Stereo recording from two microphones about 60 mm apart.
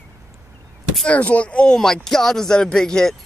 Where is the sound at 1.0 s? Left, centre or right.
Left.